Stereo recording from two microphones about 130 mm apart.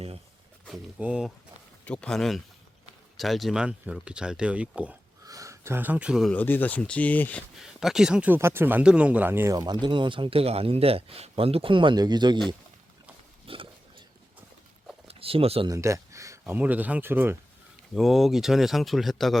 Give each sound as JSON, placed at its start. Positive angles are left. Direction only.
{"t": 0.9, "sound": "speech", "side_deg": -10}
{"t": 1.8, "sound": "speech", "side_deg": 10}
{"t": 5.2, "sound": "speech", "side_deg": -25}
{"t": 6.3, "sound": "speech", "side_deg": 15}
{"t": 7.6, "sound": "speech", "side_deg": -5}
{"t": 9.8, "sound": "speech", "side_deg": -40}
{"t": 13.5, "sound": "pig", "side_deg": -45}
{"t": 15.0, "sound": "a sound", "side_deg": -45}
{"t": 15.6, "sound": "speech", "side_deg": -25}
{"t": 17.9, "sound": "speech", "side_deg": 0}